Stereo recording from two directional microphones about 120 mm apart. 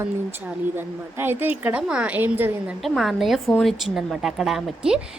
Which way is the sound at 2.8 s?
Centre (ahead or behind).